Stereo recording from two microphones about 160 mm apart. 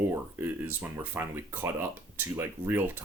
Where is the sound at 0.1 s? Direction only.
15° right (ahead or behind).